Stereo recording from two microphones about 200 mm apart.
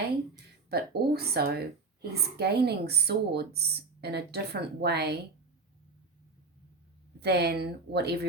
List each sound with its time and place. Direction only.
0.7 s speech: 50° right (ahead or behind)
7.2 s speech: 55° right (ahead or behind)